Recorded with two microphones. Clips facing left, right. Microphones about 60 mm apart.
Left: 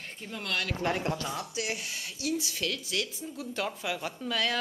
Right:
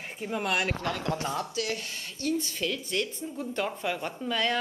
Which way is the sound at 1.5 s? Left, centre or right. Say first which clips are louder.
Right 2 dB; centre.